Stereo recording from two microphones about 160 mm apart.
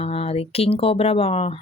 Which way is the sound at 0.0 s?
40° left (ahead or behind).